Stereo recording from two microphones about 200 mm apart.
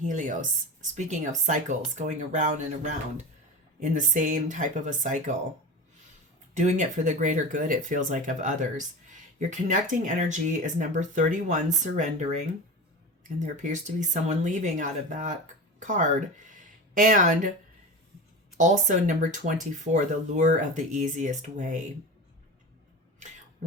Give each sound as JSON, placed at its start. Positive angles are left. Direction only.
{"t": 0.0, "sound": "speech", "side_deg": -40}
{"t": 6.5, "sound": "speech", "side_deg": -35}
{"t": 18.5, "sound": "speech", "side_deg": -40}